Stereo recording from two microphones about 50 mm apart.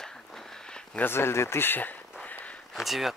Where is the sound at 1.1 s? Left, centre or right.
Left.